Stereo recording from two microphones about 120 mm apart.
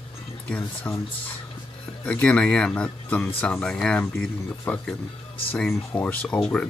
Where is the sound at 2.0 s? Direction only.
10° left (ahead or behind).